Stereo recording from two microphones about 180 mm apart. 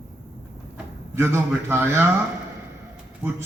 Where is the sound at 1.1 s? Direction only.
15° right (ahead or behind).